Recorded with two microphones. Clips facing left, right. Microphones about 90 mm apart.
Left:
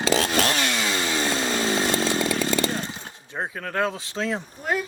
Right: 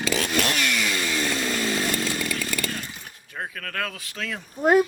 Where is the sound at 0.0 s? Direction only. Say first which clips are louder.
Left 3 dB; 30° left (ahead or behind).